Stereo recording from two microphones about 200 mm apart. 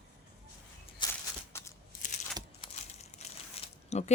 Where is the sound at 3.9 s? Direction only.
35° left (ahead or behind).